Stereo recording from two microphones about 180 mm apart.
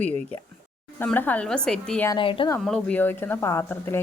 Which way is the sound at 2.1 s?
30° left (ahead or behind).